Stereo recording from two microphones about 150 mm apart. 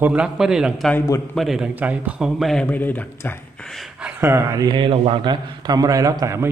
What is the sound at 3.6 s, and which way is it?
Speech, centre (ahead or behind).